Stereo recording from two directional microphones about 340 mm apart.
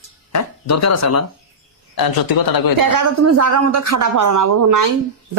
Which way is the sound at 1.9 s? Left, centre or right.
Left.